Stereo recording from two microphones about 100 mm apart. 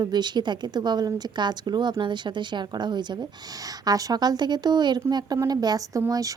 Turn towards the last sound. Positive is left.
turn(degrees=-35)  # may be behind; listen again after turning